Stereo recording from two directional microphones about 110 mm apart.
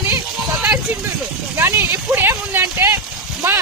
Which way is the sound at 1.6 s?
25° right (ahead or behind).